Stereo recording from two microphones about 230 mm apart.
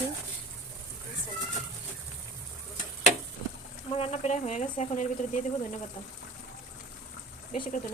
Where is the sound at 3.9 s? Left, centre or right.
Left.